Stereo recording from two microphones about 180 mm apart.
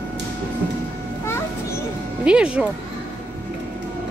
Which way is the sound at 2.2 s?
5° right (ahead or behind).